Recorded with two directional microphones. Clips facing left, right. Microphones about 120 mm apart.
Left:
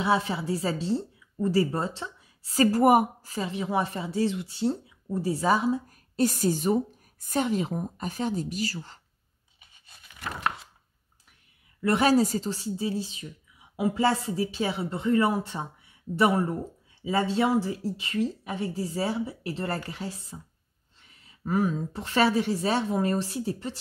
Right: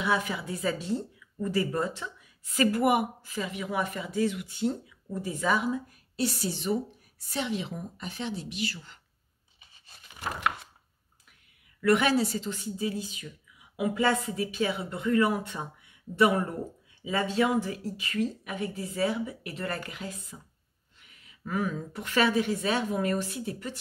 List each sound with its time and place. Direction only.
0.0 s a woman's voice: 30° left (ahead or behind)
6.1 s a woman's voice: 45° left (ahead or behind)
11.8 s a woman's voice: 30° left (ahead or behind)